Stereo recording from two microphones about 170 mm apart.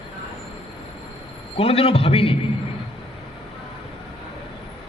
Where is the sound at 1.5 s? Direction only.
35° left (ahead or behind).